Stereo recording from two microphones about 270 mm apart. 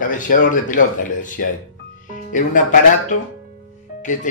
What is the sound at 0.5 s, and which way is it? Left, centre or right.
A man's voice, left.